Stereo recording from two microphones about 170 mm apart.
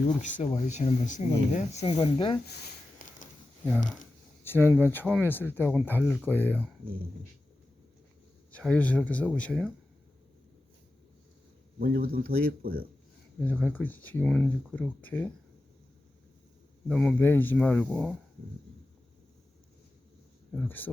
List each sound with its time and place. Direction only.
0.2 s speech: 45° left (ahead or behind); by 2.4 s 30° left (ahead or behind)
4.4 s speech: 10° left (ahead or behind)
8.5 s speech: 5° left (ahead or behind)
11.8 s speech: 60° right (ahead or behind)
13.4 s speech: 10° left (ahead or behind)
16.9 s speech: 5° left (ahead or behind)
20.6 s speech: 10° left (ahead or behind)